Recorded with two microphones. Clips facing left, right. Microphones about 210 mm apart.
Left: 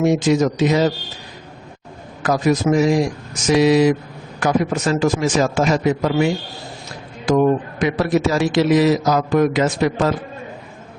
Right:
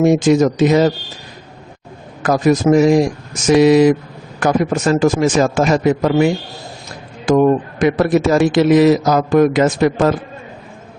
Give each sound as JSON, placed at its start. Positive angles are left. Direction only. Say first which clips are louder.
{"t": 0.0, "sound": "a man's voice", "louder": "right 4 dB", "side_deg": -50}
{"t": 2.2, "sound": "a man's voice", "louder": "right 4 dB", "side_deg": -50}